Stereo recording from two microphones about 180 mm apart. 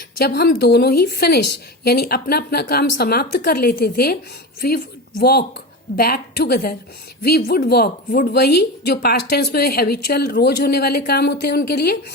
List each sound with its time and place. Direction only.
0.2 s a woman's voice: 60° left (ahead or behind)